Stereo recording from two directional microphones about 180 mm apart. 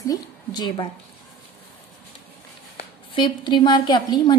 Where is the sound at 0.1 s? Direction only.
25° left (ahead or behind).